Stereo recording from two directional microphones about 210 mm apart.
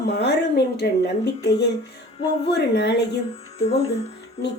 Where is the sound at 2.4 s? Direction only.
55° left (ahead or behind).